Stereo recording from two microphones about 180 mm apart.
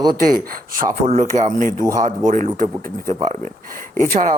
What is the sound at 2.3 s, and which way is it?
A man's voice, 45° right (ahead or behind).